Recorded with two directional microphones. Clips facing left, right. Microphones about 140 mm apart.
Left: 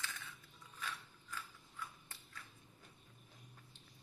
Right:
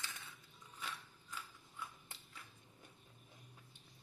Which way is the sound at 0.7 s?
20° right (ahead or behind).